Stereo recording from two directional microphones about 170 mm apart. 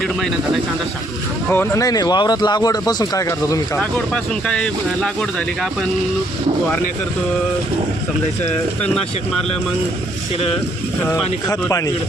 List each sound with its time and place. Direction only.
1.5 s speech: 15° left (ahead or behind)
3.8 s speech: 5° left (ahead or behind)
11.0 s speech: 20° left (ahead or behind)